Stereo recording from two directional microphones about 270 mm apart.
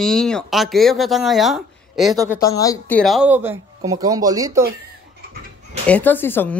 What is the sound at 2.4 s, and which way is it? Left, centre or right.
Speech, centre.